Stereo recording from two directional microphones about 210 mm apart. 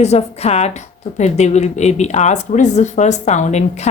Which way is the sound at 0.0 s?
30° left (ahead or behind).